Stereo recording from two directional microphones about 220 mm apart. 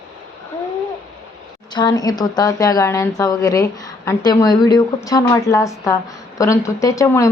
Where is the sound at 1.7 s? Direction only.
15° left (ahead or behind).